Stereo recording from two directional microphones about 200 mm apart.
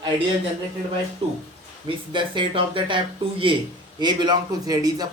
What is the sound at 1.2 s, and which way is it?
Speech, 25° right (ahead or behind).